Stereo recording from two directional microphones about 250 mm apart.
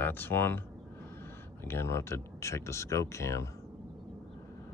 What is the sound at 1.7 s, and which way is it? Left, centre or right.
Speech, centre.